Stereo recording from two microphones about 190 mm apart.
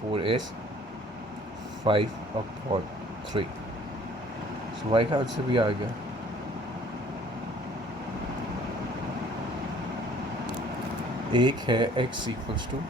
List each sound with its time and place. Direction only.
0.1 s air conditioning: 30° right (ahead or behind)
1.8 s speech: 30° right (ahead or behind)
4.9 s speech: 25° right (ahead or behind)
11.3 s speech: 25° right (ahead or behind)